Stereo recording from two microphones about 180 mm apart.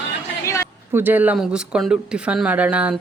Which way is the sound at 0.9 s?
10° right (ahead or behind).